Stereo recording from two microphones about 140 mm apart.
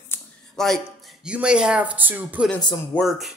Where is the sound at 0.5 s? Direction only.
5° left (ahead or behind).